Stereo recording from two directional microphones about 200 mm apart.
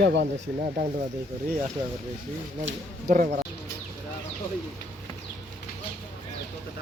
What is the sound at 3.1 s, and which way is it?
Speech, 35° right (ahead or behind).